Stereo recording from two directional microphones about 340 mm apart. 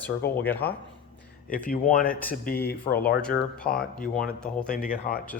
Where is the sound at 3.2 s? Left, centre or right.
Centre.